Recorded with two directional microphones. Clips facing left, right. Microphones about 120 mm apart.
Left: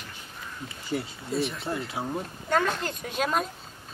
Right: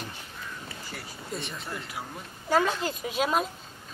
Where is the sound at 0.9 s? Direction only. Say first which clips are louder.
Left 15 dB; 25° left (ahead or behind).